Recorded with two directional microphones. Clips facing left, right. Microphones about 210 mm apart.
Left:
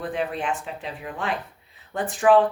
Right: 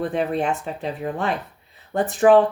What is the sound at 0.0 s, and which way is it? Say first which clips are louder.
Speech: right 5 dB; 40° right (ahead or behind).